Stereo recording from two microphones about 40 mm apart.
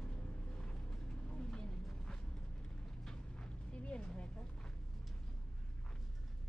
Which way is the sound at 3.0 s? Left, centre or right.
Left.